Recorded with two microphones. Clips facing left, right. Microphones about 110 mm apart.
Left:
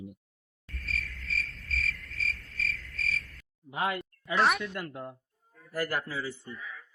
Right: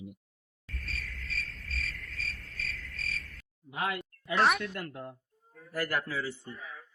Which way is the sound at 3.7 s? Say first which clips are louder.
Left 2 dB; centre (ahead or behind).